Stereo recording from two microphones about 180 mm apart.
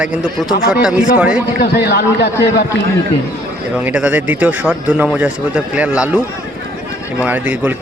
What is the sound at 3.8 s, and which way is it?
A man's voice, 10° right (ahead or behind).